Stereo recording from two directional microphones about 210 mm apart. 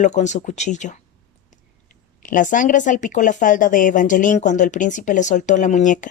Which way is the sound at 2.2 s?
40° left (ahead or behind).